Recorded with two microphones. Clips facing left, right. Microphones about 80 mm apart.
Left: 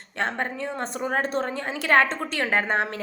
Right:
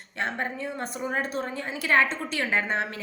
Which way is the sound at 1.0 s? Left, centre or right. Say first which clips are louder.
Left 4 dB; left.